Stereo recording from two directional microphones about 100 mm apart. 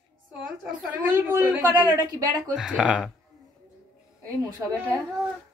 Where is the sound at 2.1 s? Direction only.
40° right (ahead or behind).